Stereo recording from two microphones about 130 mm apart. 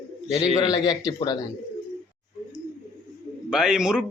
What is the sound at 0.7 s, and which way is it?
Speech, 30° left (ahead or behind).